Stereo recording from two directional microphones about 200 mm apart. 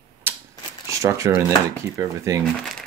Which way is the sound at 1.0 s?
15° right (ahead or behind).